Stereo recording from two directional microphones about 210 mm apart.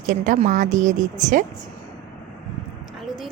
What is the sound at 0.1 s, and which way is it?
Speech, 40° right (ahead or behind).